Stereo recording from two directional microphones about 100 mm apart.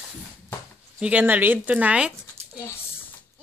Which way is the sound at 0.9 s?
15° right (ahead or behind).